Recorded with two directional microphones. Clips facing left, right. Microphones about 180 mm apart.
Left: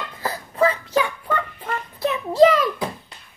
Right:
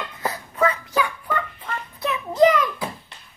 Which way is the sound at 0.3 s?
30° left (ahead or behind).